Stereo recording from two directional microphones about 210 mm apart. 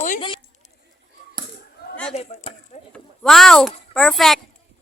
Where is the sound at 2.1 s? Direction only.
30° left (ahead or behind).